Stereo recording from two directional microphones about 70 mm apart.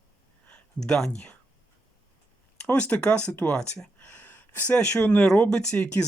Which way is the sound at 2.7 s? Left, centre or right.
Centre.